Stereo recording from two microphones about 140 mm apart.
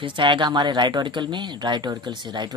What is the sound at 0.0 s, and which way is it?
Speech, 35° right (ahead or behind).